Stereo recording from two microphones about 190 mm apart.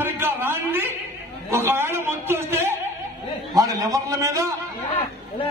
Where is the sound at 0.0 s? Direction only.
10° right (ahead or behind).